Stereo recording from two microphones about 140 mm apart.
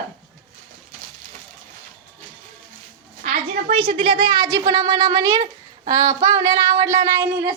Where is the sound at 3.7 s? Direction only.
45° right (ahead or behind); by 7.5 s 25° right (ahead or behind).